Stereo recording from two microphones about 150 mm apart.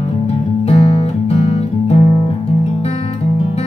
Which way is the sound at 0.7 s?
45° left (ahead or behind).